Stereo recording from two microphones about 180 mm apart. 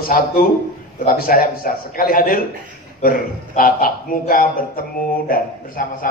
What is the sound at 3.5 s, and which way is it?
Speech, 50° left (ahead or behind).